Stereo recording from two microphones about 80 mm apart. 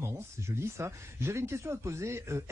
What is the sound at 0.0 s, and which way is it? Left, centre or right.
A man's voice, right.